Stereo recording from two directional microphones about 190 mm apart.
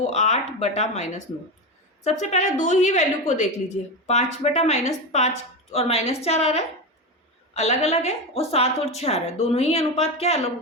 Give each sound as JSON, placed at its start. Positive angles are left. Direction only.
{"t": 0.0, "sound": "a woman's voice", "side_deg": 35}